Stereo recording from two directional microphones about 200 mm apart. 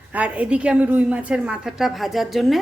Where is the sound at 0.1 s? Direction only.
5° right (ahead or behind).